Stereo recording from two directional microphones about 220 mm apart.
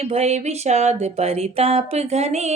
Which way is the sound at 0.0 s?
30° right (ahead or behind).